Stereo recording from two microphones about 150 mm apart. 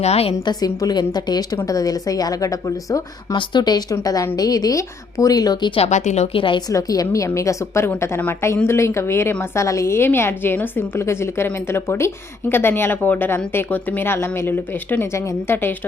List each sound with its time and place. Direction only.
0.0 s speech: 45° left (ahead or behind)
0.3 s speech: 25° left (ahead or behind)
5.8 s speech: 50° left (ahead or behind)
6.3 s a woman's voice: 35° left (ahead or behind); by 15.7 s 15° left (ahead or behind)